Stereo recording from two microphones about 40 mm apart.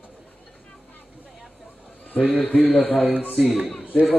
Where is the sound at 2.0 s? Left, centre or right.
Left.